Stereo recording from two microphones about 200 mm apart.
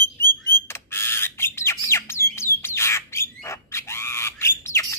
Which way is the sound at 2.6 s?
15° left (ahead or behind).